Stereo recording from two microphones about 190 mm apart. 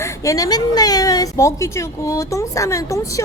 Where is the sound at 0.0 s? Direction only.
15° left (ahead or behind).